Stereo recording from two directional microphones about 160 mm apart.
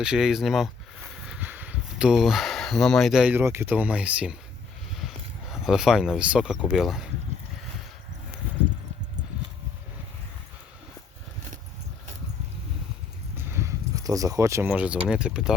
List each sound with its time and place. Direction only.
0.0 s speech: 5° right (ahead or behind)
13.3 s a sound: 15° right (ahead or behind)
15.1 s speech: 5° right (ahead or behind)